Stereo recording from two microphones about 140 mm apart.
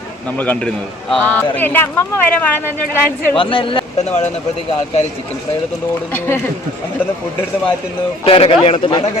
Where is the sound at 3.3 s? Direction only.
40° left (ahead or behind).